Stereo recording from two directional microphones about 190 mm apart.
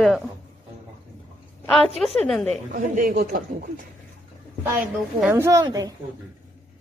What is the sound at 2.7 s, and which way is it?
Speech, 45° right (ahead or behind).